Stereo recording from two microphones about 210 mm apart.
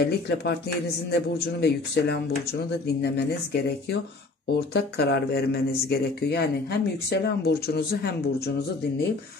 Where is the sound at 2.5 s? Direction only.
50° left (ahead or behind).